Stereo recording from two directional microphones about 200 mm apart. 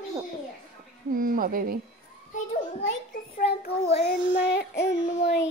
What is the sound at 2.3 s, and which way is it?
Children playing, 40° left (ahead or behind).